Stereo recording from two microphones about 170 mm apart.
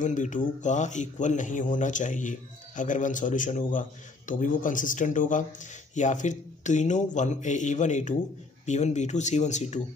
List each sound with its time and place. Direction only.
0.0 s speech: 45° left (ahead or behind)